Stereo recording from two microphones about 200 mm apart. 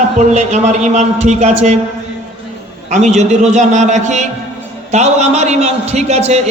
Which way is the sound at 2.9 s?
35° right (ahead or behind).